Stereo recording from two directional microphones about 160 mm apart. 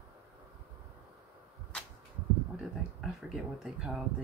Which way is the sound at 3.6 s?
5° right (ahead or behind).